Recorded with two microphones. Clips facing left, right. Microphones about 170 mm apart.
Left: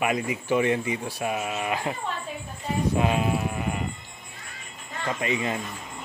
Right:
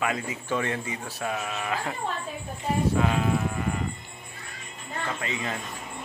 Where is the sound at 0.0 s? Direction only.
15° left (ahead or behind).